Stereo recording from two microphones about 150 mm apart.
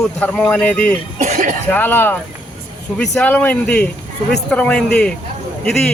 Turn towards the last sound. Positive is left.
turn(degrees=5)  # may be behind; listen again after turning